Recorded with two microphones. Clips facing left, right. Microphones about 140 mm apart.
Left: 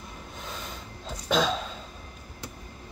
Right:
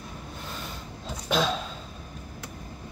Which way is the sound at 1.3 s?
5° right (ahead or behind).